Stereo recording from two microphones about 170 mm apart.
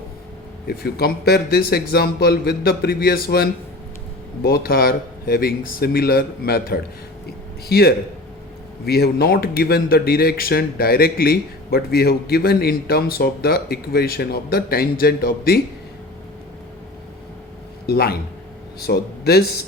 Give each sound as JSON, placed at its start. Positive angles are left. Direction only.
{"t": 0.7, "sound": "a man's voice", "side_deg": 65}
{"t": 17.8, "sound": "speech", "side_deg": 65}